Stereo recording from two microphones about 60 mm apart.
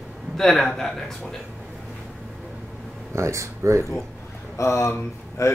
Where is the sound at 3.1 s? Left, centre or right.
Right.